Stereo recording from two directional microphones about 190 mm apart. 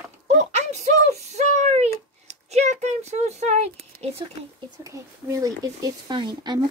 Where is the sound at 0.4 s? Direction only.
35° right (ahead or behind).